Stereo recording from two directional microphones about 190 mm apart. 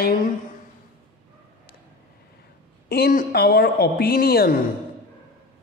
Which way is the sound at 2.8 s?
55° left (ahead or behind).